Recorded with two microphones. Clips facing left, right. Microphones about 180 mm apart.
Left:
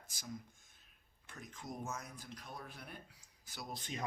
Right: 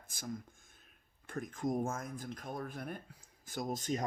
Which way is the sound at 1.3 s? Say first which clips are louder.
Right 12 dB; 50° right (ahead or behind).